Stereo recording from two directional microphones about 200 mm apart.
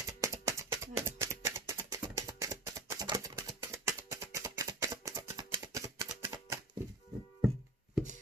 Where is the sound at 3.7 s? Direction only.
15° right (ahead or behind).